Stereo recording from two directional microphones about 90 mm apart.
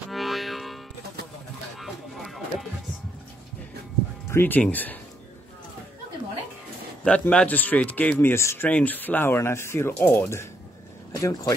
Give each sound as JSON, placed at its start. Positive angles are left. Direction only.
{"t": 0.1, "sound": "music", "side_deg": 0}
{"t": 1.8, "sound": "a sound", "side_deg": 0}
{"t": 4.3, "sound": "speech", "side_deg": 20}
{"t": 7.1, "sound": "speech", "side_deg": 10}
{"t": 8.6, "sound": "a man's voice", "side_deg": 15}